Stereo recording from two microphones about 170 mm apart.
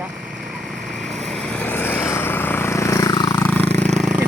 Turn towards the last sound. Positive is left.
turn(degrees=0)  # may be behind; listen again after turning